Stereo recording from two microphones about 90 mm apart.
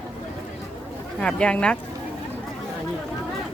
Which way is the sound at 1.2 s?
10° left (ahead or behind).